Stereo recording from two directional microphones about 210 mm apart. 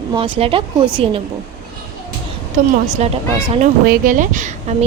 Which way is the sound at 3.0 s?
30° right (ahead or behind).